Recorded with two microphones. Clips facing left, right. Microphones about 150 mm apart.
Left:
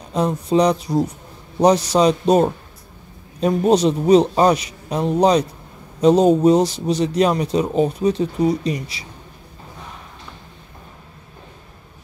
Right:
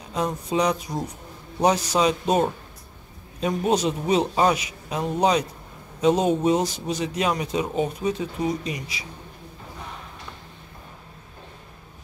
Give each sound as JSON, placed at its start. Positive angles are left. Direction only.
{"t": 0.1, "sound": "a man's voice", "side_deg": 35}